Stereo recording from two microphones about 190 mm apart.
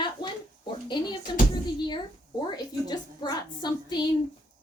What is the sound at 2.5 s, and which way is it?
A woman's voice, 20° left (ahead or behind).